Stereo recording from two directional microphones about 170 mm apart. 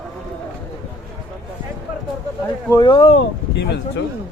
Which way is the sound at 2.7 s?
25° left (ahead or behind).